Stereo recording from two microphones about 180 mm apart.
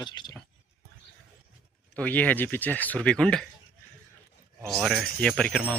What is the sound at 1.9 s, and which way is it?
Speech, 10° left (ahead or behind).